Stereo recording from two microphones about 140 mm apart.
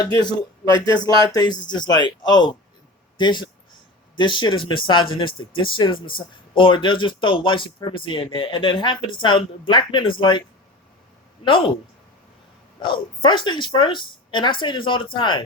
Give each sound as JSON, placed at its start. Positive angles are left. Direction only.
{"t": 0.0, "sound": "speech", "side_deg": 30}
{"t": 11.4, "sound": "speech", "side_deg": 40}
{"t": 12.8, "sound": "speech", "side_deg": 35}